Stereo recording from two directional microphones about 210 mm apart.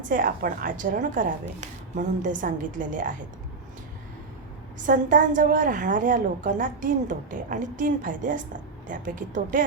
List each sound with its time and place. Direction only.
0.1 s a woman's voice: 40° right (ahead or behind)
4.9 s a woman's voice: 40° right (ahead or behind)